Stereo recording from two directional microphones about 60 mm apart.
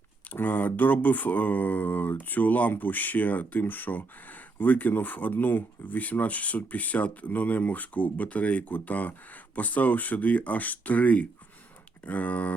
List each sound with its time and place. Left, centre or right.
0.3 s speech: left